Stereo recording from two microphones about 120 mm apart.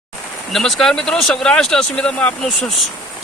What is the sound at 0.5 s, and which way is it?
Speech, 5° left (ahead or behind).